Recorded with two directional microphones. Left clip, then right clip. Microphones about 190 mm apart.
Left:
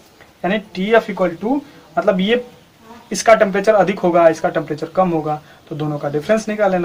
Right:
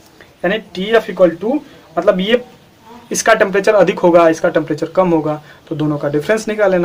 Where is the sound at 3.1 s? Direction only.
50° right (ahead or behind).